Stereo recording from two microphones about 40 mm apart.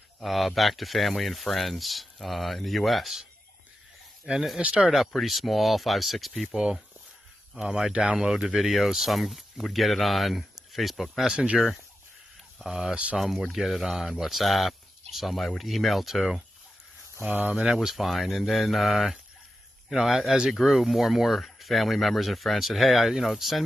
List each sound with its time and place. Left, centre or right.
0.2 s speech: centre
4.6 s speech: right
5.1 s speech: centre
6.4 s speech: centre
7.9 s speech: right
8.2 s speech: centre
12.5 s speech: centre
12.9 s speech: right
13.2 s speech: centre
17.2 s speech: right
17.8 s speech: centre